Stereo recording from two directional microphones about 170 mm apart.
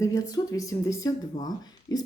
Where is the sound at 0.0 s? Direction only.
20° left (ahead or behind).